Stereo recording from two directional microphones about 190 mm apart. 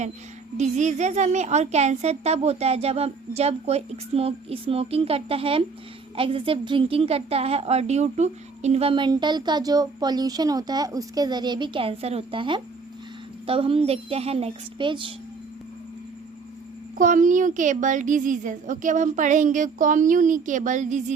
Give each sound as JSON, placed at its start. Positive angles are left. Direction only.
{"t": 0.5, "sound": "a woman's voice", "side_deg": -40}
{"t": 17.0, "sound": "a woman's voice", "side_deg": -45}